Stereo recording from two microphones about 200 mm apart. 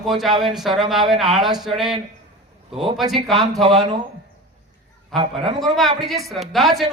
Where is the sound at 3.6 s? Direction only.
30° right (ahead or behind).